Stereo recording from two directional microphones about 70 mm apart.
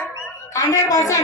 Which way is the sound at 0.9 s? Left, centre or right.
Left.